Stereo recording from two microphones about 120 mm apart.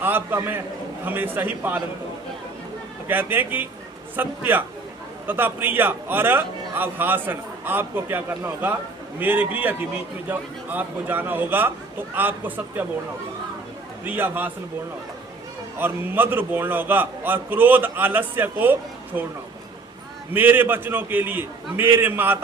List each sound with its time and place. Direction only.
0.0 s a man's voice: 15° right (ahead or behind)
3.1 s a man's voice: 15° right (ahead or behind)
9.2 s a man's voice: 15° right (ahead or behind)
14.0 s a man's voice: 15° right (ahead or behind)
15.8 s a man's voice: 15° right (ahead or behind)
20.3 s a man's voice: 15° right (ahead or behind)